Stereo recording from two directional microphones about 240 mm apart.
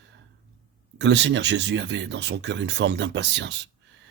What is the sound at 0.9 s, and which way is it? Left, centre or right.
Speech, right.